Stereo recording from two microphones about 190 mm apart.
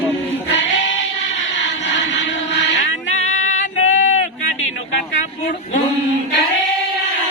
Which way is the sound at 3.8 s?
90° left.